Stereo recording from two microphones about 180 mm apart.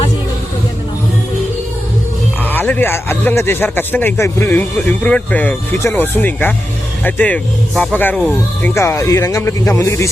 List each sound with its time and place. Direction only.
2.4 s speech: 10° left (ahead or behind)